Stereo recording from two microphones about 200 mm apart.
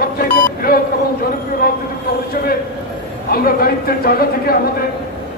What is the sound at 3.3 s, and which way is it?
Speech, 50° left (ahead or behind).